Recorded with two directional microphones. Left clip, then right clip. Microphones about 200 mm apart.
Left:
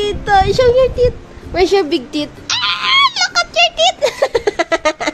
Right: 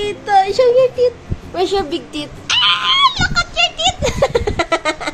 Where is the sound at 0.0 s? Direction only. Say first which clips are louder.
Left 1 dB; 40° left (ahead or behind).